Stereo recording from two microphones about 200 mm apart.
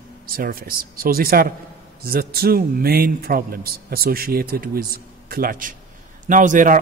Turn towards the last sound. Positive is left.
turn(degrees=-40)  # may be behind; listen again after turning